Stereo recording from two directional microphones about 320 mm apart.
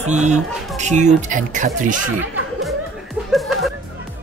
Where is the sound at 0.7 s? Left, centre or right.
Right.